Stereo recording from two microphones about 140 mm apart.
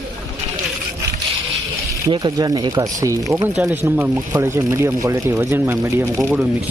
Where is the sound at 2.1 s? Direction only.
30° right (ahead or behind).